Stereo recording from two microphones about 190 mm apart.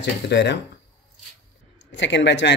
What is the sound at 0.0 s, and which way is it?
Speech, 65° left (ahead or behind).